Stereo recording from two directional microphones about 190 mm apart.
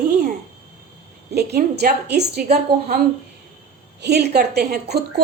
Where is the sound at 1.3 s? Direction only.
60° right (ahead or behind).